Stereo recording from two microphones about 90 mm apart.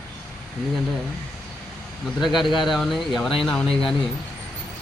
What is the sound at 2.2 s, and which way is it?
Speech, centre (ahead or behind).